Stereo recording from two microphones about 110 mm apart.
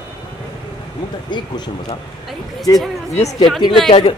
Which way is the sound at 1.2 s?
45° left (ahead or behind).